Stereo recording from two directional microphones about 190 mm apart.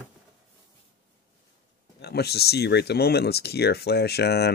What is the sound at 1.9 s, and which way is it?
Speech, 60° left (ahead or behind).